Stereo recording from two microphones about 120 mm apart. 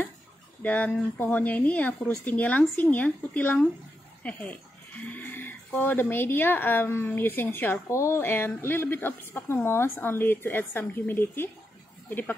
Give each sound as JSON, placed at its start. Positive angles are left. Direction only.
{"t": 0.6, "sound": "speech", "side_deg": 15}